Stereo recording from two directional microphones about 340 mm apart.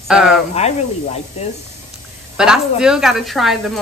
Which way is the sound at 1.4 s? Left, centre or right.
Centre.